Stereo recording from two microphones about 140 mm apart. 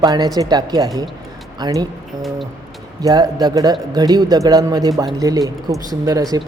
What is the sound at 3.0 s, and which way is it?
A man's voice, 30° right (ahead or behind).